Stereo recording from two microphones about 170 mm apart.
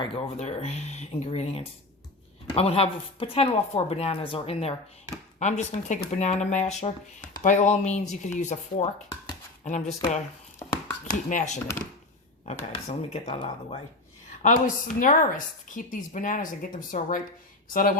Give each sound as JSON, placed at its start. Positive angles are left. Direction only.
{"t": 0.0, "sound": "speech", "side_deg": 35}
{"t": 5.4, "sound": "a woman's voice", "side_deg": 45}
{"t": 12.9, "sound": "speech", "side_deg": 35}
{"t": 14.3, "sound": "a woman's voice", "side_deg": 45}